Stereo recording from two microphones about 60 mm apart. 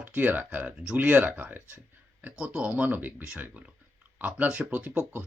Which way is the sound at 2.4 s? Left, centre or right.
Centre.